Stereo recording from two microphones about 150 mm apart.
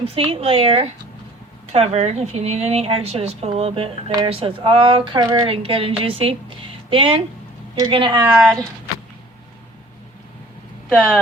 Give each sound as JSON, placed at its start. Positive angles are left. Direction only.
{"t": 0.0, "sound": "a woman's voice", "side_deg": -40}
{"t": 8.3, "sound": "speech", "side_deg": 0}
{"t": 10.8, "sound": "speech", "side_deg": 0}